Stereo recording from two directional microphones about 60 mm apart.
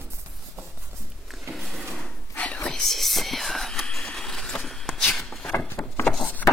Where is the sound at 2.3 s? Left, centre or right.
Left.